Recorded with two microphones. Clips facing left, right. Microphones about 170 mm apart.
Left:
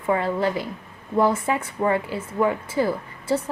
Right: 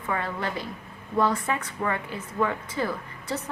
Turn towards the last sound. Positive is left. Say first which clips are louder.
# left 8 dB
turn(degrees=25)  # may be behind; listen again after turning